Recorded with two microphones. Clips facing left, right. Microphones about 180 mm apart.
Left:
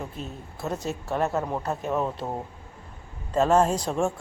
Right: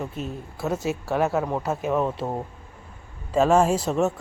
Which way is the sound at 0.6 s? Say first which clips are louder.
Right 4 dB; centre (ahead or behind).